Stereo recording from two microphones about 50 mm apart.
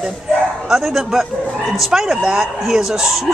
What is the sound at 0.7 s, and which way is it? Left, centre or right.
Speech, centre.